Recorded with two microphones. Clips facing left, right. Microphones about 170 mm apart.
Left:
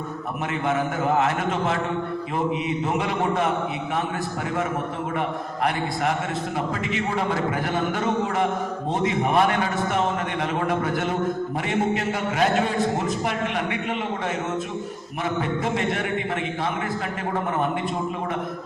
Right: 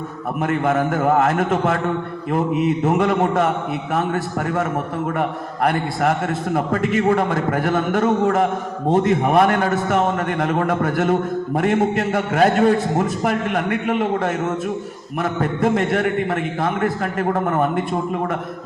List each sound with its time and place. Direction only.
0.4 s a man's voice: 50° right (ahead or behind)
5.6 s a man's voice: 50° right (ahead or behind)
15.2 s a man's voice: 50° right (ahead or behind)